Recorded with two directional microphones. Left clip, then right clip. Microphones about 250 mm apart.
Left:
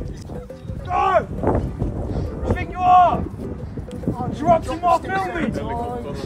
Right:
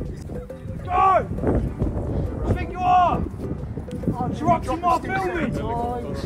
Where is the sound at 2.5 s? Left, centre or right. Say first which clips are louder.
Left 5 dB; left.